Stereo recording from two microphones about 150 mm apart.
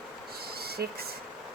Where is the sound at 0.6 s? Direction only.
90° right.